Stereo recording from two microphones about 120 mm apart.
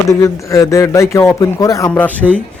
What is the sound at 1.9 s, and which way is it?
Speech, 15° left (ahead or behind).